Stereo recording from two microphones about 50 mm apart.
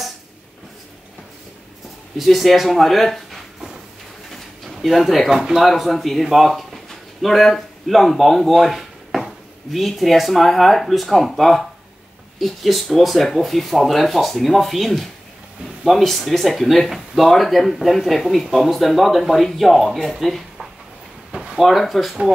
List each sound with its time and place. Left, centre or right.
2.1 s speech: centre
21.3 s drawer open or close: centre
21.5 s speech: centre